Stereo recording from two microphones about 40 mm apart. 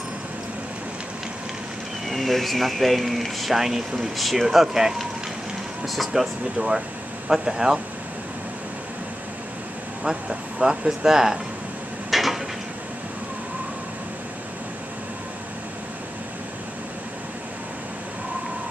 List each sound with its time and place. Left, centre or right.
2.0 s speech: centre
6.1 s speech: centre
10.6 s speech: right
12.1 s dishes: centre